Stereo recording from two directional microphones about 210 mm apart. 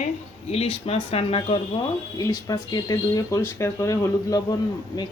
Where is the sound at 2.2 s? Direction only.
15° left (ahead or behind).